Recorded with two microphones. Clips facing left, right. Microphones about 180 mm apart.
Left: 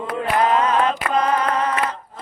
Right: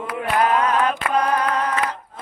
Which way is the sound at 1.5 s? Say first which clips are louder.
Left 1 dB; 5° left (ahead or behind).